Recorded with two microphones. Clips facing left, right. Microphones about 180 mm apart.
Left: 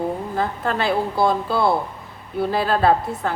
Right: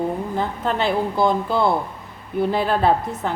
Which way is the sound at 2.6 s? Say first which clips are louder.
Left 1 dB; 20° right (ahead or behind).